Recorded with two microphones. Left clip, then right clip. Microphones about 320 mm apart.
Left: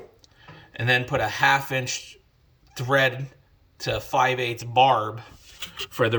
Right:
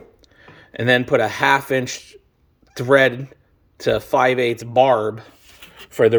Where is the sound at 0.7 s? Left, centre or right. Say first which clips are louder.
Right 6 dB; centre.